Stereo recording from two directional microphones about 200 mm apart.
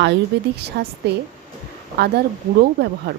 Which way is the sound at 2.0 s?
55° right (ahead or behind).